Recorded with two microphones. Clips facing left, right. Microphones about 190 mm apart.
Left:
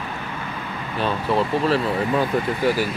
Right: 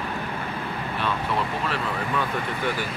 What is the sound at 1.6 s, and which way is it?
Speech, 35° left (ahead or behind).